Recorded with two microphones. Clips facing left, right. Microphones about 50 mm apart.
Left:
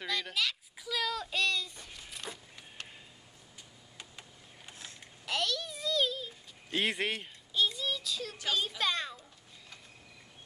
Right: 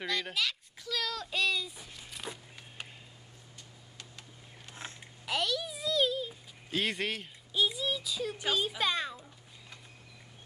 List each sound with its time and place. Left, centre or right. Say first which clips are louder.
0.0 s a child's voice: right 1 dB; centre
4.0 s a sound: left 1 dB; centre
5.2 s a sound: right 1 dB; centre
6.7 s speech: left 1 dB; centre
7.5 s child singing: right 1 dB; centre
8.4 s a child's voice: right 1 dB; centre